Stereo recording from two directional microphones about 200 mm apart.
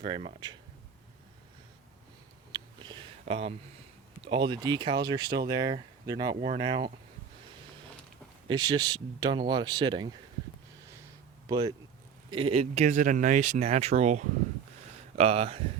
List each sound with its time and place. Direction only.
0.0 s speech: 25° right (ahead or behind)
2.5 s a sound: 20° right (ahead or behind)
4.2 s speech: 20° right (ahead or behind)
8.4 s speech: 20° right (ahead or behind)
11.4 s speech: 20° right (ahead or behind)